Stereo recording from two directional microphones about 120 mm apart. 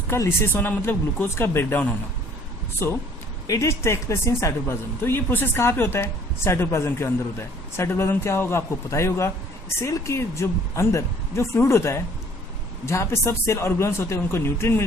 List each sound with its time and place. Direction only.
0.1 s a woman's voice: 20° left (ahead or behind)
3.4 s a woman's voice: 25° left (ahead or behind)